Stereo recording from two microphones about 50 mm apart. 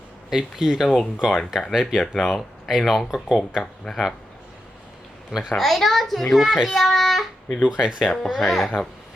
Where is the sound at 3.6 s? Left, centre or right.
Centre.